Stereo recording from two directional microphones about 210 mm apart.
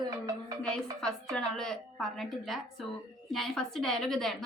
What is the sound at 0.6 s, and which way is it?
A woman's voice, 5° left (ahead or behind).